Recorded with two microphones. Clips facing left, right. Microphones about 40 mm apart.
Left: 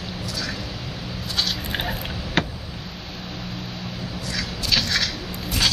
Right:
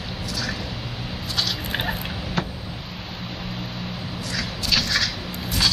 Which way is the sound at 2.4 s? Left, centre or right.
Left.